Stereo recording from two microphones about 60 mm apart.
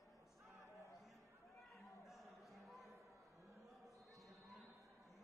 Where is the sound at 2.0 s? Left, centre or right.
Centre.